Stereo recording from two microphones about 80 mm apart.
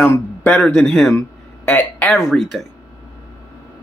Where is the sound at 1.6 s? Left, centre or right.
Left.